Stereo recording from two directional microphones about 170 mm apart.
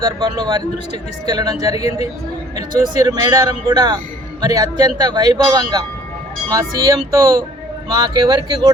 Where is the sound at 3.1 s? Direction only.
20° right (ahead or behind).